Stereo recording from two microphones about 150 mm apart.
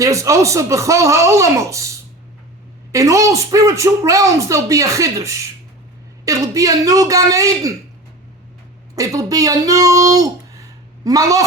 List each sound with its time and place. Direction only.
0.0 s a woman's voice: 20° right (ahead or behind)
2.9 s a woman's voice: 20° right (ahead or behind)
9.0 s speech: 25° right (ahead or behind)